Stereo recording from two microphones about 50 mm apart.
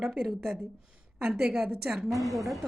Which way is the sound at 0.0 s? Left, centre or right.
Centre.